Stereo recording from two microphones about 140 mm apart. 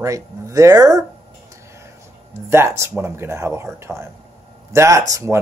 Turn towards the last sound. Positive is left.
turn(degrees=-20)  # may be behind; listen again after turning